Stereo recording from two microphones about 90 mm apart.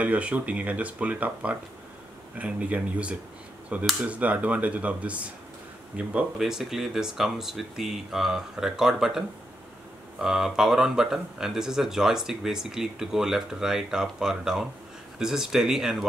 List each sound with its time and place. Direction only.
0.0 s speech: 15° right (ahead or behind)
6.3 s speech: centre (ahead or behind)
10.2 s speech: 5° right (ahead or behind)